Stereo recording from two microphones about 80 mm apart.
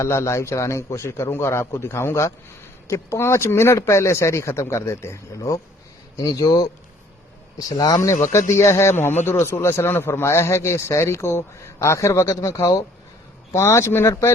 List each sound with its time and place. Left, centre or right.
0.0 s a man's voice: left
6.4 s speech: left
7.7 s a man's voice: left
13.5 s a man's voice: left